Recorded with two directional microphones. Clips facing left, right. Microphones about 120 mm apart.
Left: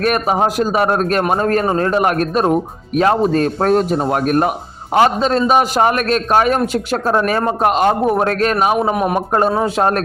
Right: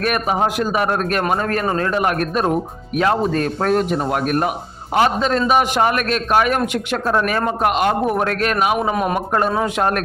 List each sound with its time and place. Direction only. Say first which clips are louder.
0.0 s a man's voice: left 3 dB; 35° left (ahead or behind)
8.9 s speech: left 3 dB; 10° left (ahead or behind)
9.1 s a man's voice: left 3 dB; 30° left (ahead or behind)